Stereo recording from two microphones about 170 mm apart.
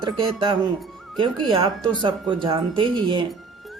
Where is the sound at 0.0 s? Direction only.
30° right (ahead or behind).